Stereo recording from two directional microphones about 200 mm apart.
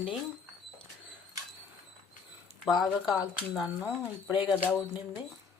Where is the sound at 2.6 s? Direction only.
Centre (ahead or behind).